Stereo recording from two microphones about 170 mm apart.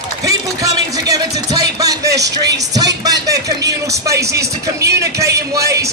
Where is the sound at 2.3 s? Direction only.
20° right (ahead or behind).